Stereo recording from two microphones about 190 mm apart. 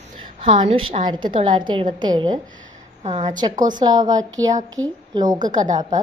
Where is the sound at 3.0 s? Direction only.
35° right (ahead or behind).